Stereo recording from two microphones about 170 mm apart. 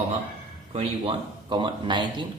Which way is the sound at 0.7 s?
30° right (ahead or behind).